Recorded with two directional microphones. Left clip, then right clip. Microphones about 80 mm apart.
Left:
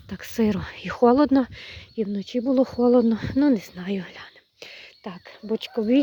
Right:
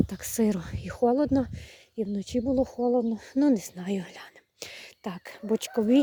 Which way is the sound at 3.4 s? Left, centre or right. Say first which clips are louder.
Left 2 dB; centre.